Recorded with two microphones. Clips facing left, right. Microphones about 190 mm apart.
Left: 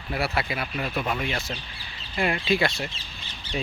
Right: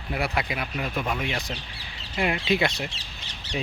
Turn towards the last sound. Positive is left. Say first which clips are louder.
# even
turn(degrees=-90)